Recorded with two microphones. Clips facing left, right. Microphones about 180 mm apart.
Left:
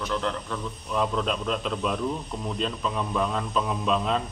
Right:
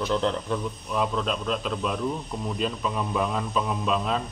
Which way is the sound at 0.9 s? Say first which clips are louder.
Left 1 dB; centre (ahead or behind).